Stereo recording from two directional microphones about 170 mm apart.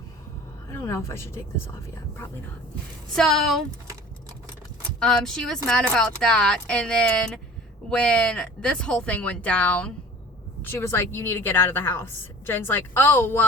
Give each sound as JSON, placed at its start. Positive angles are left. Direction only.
{"t": 0.7, "sound": "a woman's voice", "side_deg": 15}
{"t": 3.2, "sound": "speech", "side_deg": 0}
{"t": 4.9, "sound": "a woman's voice", "side_deg": 5}